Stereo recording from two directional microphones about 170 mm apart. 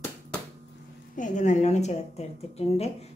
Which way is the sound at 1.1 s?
50° left (ahead or behind).